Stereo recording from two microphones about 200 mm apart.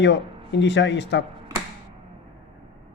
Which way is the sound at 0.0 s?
60° left (ahead or behind).